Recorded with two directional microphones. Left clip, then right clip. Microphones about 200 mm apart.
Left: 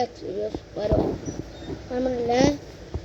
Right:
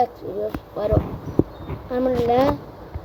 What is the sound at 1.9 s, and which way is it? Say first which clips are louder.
Speech: right 4 dB; 20° right (ahead or behind).